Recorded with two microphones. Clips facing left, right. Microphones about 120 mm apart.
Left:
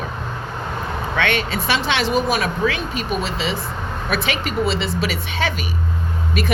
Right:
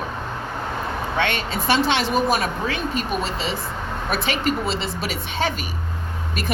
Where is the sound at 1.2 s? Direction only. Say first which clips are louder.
Left 3 dB; 65° left (ahead or behind).